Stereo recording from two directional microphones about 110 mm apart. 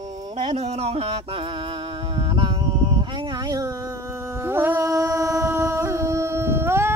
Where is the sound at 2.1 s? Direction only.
50° right (ahead or behind).